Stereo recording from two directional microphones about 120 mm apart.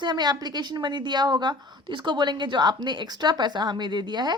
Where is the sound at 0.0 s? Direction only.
35° right (ahead or behind).